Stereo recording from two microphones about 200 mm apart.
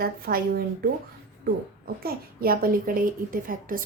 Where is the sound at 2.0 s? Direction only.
50° right (ahead or behind).